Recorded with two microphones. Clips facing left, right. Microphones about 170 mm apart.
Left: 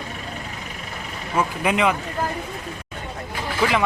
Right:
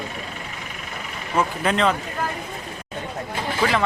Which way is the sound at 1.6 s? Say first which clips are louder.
Left 1 dB; 10° left (ahead or behind).